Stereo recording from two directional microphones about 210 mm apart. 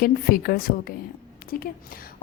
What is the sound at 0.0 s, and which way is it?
Speech, 45° left (ahead or behind).